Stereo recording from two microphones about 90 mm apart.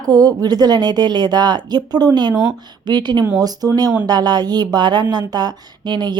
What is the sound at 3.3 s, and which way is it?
A woman's voice, 45° right (ahead or behind).